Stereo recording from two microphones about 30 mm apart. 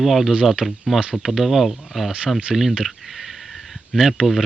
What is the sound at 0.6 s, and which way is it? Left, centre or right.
Speech, left.